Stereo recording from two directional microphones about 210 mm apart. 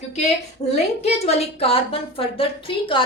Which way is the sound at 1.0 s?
30° left (ahead or behind).